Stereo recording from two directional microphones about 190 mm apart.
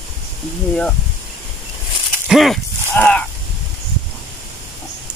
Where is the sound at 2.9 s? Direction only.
5° left (ahead or behind).